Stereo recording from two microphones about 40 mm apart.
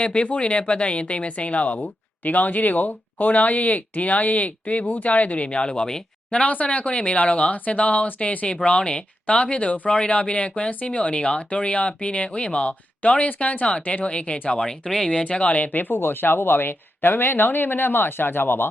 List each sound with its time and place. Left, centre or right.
0.0 s a woman's voice: left
6.5 s a woman's voice: left
8.6 s a woman's voice: left
14.0 s speech: left
14.6 s speech: centre
15.1 s a woman's voice: left
16.0 s speech: left